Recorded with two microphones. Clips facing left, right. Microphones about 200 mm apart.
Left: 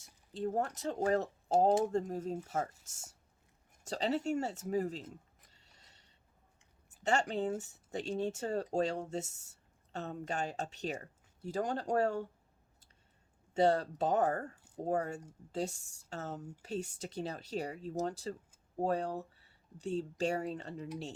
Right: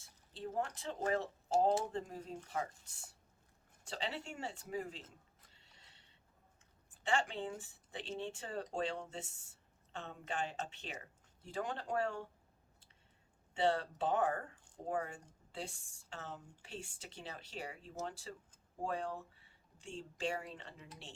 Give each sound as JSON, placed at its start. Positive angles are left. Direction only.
{"t": 0.3, "sound": "speech", "side_deg": 45}
{"t": 5.5, "sound": "a sound", "side_deg": 40}
{"t": 7.0, "sound": "speech", "side_deg": 45}
{"t": 13.5, "sound": "speech", "side_deg": 40}